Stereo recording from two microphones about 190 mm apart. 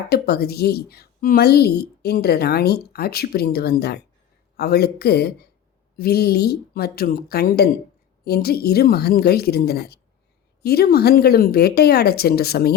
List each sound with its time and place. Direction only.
0.1 s a woman's voice: 55° left (ahead or behind)